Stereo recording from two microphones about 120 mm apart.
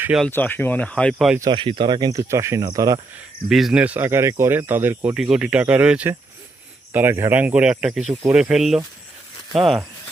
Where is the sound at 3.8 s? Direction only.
15° right (ahead or behind).